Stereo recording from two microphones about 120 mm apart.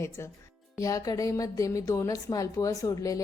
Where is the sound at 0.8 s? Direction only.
30° left (ahead or behind).